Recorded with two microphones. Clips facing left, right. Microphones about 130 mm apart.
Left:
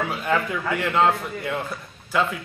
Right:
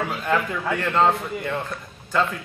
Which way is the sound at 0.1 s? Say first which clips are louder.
Even; 5° left (ahead or behind).